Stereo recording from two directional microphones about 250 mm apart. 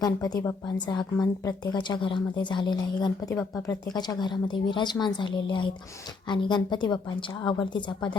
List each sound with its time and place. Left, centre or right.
0.0 s a woman's voice: centre